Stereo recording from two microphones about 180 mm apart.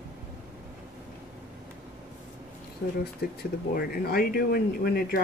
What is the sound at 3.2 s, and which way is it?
Speech, 60° left (ahead or behind).